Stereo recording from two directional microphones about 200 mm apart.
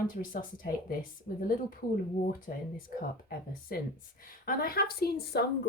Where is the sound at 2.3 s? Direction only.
45° left (ahead or behind).